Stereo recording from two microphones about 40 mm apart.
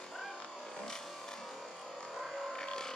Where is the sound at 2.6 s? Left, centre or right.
Centre.